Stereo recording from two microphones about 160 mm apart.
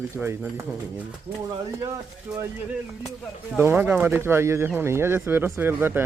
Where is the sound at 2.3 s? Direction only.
10° right (ahead or behind).